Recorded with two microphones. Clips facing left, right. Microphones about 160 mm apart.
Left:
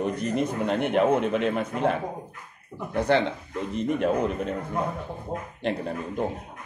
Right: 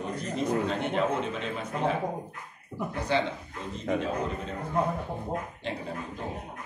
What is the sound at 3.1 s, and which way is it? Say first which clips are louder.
A man's voice: left 5 dB; 60° left (ahead or behind).